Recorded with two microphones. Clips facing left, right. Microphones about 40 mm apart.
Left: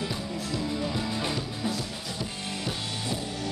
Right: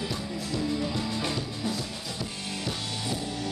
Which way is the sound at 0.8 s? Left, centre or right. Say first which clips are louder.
Even; centre.